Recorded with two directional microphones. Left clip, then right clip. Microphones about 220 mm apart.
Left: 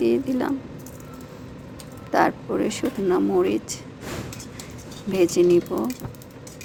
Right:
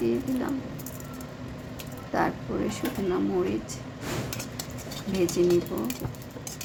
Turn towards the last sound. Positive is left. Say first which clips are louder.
# left 6 dB
turn(degrees=40)  # may be behind; listen again after turning